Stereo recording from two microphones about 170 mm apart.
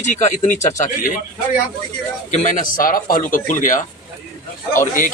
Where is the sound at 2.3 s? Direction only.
50° left (ahead or behind).